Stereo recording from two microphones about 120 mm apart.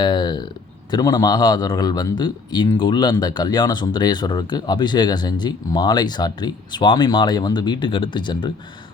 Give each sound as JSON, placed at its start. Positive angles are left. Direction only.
{"t": 0.0, "sound": "speech", "side_deg": 40}